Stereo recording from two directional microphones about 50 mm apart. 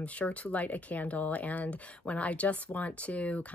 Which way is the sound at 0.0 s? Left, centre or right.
Left.